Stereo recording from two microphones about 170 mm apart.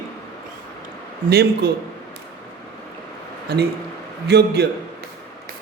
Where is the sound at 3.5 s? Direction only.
70° right (ahead or behind).